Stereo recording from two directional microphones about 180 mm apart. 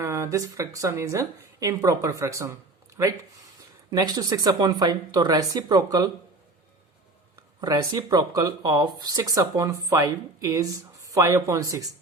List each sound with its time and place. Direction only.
0.0 s speech: 15° right (ahead or behind)
7.6 s speech: 20° right (ahead or behind)